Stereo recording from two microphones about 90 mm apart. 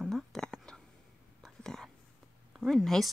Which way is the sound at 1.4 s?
5° left (ahead or behind).